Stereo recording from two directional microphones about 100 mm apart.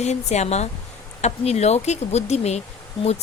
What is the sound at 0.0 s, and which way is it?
Speech, 90° left.